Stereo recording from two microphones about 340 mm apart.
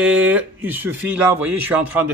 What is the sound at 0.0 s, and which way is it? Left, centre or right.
Speech, centre.